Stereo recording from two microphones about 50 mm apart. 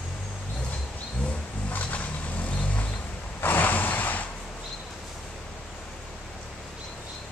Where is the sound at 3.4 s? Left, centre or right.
Left.